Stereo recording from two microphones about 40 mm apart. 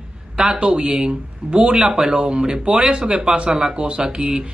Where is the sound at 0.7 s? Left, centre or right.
Centre.